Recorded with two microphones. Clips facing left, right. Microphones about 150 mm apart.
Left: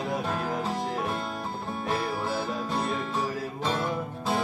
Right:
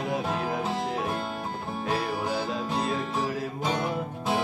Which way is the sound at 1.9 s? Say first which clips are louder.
Right 1 dB; 20° right (ahead or behind).